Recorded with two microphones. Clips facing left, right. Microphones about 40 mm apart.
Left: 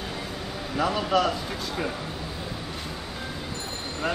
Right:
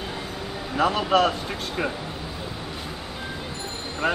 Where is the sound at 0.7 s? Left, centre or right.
Right.